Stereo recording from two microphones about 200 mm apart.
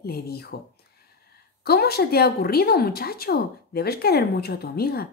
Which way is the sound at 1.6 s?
50° left (ahead or behind).